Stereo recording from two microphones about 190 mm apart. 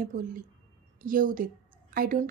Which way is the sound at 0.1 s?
45° right (ahead or behind).